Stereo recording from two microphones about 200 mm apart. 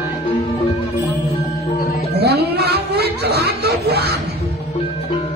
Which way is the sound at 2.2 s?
55° right (ahead or behind).